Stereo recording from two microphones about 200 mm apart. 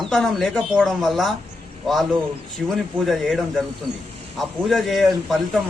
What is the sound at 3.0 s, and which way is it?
Speech, centre (ahead or behind).